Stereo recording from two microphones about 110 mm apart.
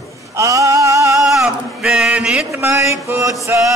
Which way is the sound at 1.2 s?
5° right (ahead or behind).